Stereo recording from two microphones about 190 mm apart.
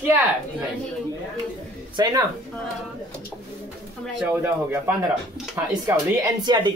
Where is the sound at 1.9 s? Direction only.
20° right (ahead or behind).